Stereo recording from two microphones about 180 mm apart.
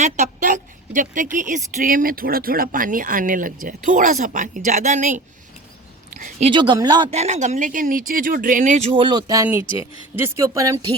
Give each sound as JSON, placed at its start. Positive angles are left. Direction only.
{"t": 0.0, "sound": "a woman's voice", "side_deg": -45}
{"t": 6.4, "sound": "speech", "side_deg": -25}
{"t": 7.1, "sound": "speech", "side_deg": -40}